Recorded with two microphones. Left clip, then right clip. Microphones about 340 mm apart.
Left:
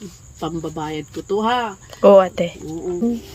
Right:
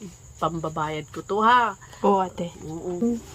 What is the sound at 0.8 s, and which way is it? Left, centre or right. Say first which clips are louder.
Speech: left 4 dB; right.